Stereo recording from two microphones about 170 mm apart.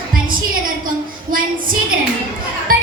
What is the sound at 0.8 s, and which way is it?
Speech, 55° right (ahead or behind).